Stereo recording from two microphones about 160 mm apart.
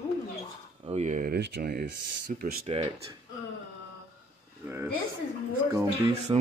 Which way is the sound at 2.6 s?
35° right (ahead or behind).